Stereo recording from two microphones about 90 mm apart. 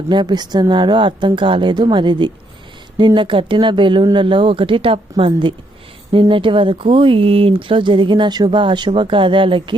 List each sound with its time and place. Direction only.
0.1 s speech: 55° right (ahead or behind)
8.4 s speech: 65° right (ahead or behind)